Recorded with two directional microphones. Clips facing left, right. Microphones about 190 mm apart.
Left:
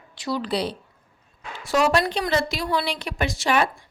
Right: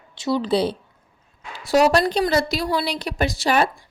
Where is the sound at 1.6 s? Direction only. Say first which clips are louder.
Right 4 dB; 35° right (ahead or behind).